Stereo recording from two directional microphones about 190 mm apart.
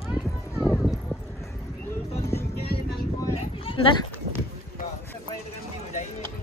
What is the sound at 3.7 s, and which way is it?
Speech, 25° left (ahead or behind).